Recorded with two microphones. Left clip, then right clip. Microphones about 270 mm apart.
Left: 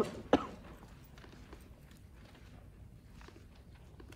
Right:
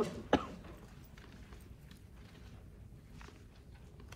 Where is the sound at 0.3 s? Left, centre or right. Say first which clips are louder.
Left 2 dB; left.